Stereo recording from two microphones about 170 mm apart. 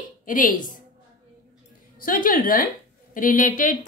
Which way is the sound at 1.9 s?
55° left (ahead or behind).